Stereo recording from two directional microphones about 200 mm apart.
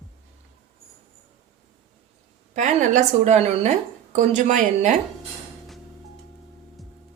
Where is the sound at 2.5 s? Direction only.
35° right (ahead or behind).